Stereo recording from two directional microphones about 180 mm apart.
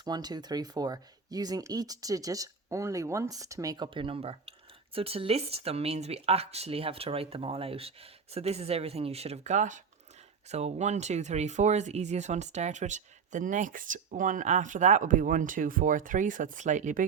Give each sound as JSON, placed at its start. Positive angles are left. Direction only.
{"t": 0.0, "sound": "speech", "side_deg": -20}